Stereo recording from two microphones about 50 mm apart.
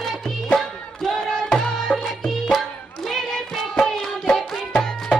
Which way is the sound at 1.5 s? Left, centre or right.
Centre.